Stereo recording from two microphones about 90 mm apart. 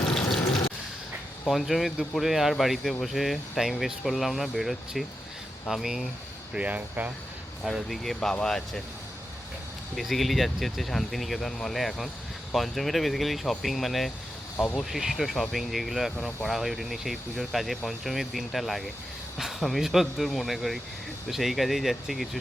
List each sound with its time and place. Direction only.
0.0 s water tap: 5° left (ahead or behind)
1.5 s speech: centre (ahead or behind); by 7.1 s 15° right (ahead or behind)
7.6 s speech: centre (ahead or behind)
9.9 s speech: centre (ahead or behind)
14.5 s speech: 20° left (ahead or behind)
14.8 s speech: 5° right (ahead or behind)